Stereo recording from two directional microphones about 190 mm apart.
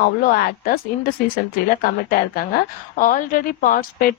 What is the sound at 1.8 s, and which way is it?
A woman's voice, 50° left (ahead or behind).